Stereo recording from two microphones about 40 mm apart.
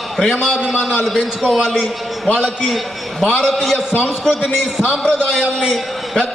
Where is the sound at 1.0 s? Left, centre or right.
Centre.